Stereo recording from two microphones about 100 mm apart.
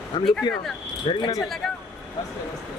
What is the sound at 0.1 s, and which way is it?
Speech, 50° left (ahead or behind).